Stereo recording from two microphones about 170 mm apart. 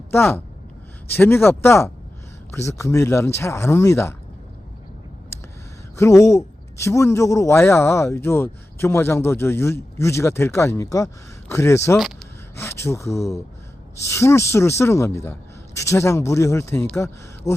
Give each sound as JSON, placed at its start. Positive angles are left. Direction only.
{"t": 0.1, "sound": "a man's voice", "side_deg": 15}
{"t": 6.0, "sound": "a man's voice", "side_deg": 20}